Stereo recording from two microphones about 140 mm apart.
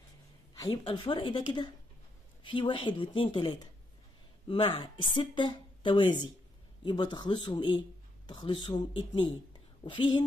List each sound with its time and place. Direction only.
0.6 s speech: 30° left (ahead or behind)